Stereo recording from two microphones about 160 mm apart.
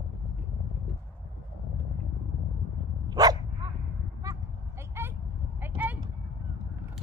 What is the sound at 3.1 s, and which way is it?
Dog, 25° right (ahead or behind).